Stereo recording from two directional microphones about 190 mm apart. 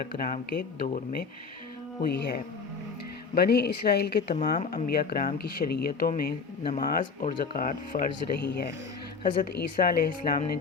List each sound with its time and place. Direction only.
0.2 s speech: 50° left (ahead or behind)
4.4 s speech: 45° left (ahead or behind)
8.4 s speech: 65° left (ahead or behind)